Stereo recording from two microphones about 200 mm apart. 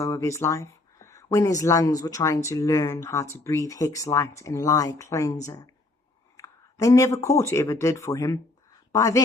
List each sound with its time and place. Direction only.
0.0 s speech: 15° left (ahead or behind)
6.3 s a sound: 15° left (ahead or behind)
7.3 s a woman's voice: 15° left (ahead or behind)